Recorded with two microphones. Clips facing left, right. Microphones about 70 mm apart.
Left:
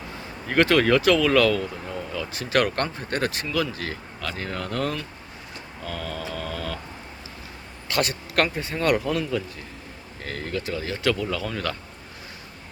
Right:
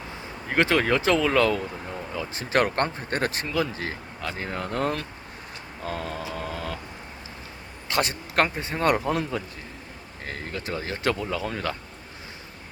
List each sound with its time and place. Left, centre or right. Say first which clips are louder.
0.4 s speech: left 3 dB; centre
5.8 s vehicle: right 1 dB; right
6.2 s speech: left 1 dB; right
7.9 s speech: left 1 dB; right
10.2 s speech: left 3 dB; right